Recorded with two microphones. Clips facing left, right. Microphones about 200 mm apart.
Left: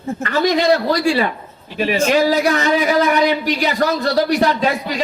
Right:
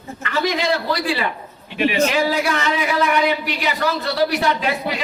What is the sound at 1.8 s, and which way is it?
A man's voice, 40° left (ahead or behind).